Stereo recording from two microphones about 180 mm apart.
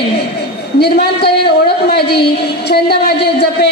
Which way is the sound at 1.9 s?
65° left (ahead or behind).